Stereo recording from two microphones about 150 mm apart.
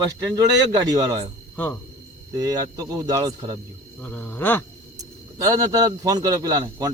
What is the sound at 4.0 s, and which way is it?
Speech, 10° left (ahead or behind).